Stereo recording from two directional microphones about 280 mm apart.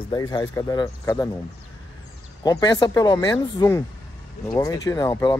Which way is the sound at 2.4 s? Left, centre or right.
Centre.